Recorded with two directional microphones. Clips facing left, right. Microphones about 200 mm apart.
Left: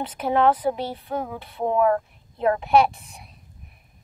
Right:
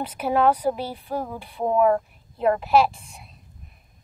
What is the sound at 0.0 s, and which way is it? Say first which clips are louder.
A woman's voice: even; 10° right (ahead or behind).